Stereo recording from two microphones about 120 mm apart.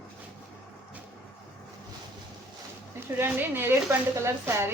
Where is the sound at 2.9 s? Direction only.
20° right (ahead or behind).